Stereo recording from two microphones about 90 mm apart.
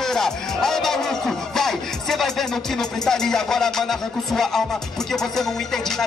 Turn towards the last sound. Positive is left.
turn(degrees=5)  # may be behind; listen again after turning